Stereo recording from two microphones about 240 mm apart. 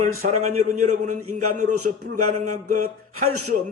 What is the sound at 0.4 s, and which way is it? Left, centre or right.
A man's voice, right.